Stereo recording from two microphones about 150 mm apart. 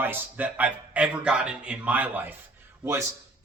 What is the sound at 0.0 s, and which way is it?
A man's voice, 15° right (ahead or behind).